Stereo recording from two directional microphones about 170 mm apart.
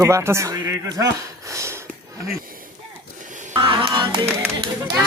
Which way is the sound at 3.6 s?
30° right (ahead or behind).